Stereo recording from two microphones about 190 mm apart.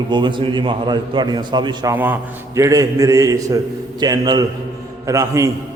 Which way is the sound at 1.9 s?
10° right (ahead or behind).